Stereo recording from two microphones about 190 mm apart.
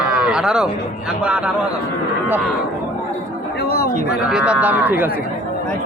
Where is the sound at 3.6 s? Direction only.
55° left (ahead or behind).